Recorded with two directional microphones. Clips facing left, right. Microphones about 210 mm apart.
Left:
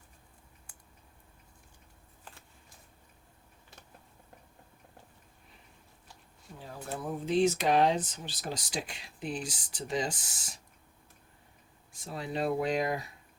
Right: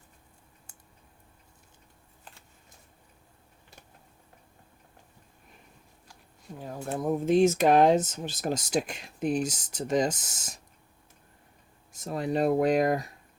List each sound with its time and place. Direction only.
0.7 s typing: 25° right (ahead or behind)
6.6 s speech: 45° right (ahead or behind)
12.0 s speech: 45° right (ahead or behind)